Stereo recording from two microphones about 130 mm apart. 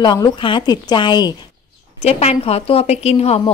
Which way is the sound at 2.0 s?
50° left (ahead or behind).